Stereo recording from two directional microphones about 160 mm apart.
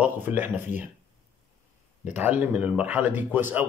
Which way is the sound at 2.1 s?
10° right (ahead or behind).